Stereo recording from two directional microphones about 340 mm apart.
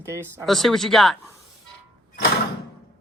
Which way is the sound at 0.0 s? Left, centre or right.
Centre.